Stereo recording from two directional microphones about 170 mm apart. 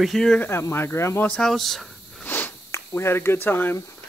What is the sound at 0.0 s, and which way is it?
Speech, centre (ahead or behind).